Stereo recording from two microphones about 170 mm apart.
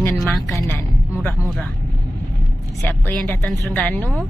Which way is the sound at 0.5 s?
15° left (ahead or behind).